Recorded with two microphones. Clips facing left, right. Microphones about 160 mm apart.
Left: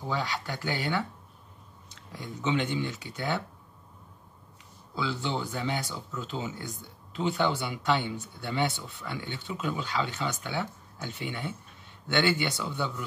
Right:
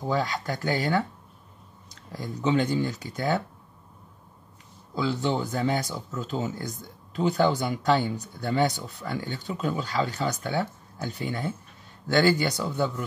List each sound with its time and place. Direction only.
0.0 s speech: 40° right (ahead or behind)
4.9 s speech: 40° right (ahead or behind)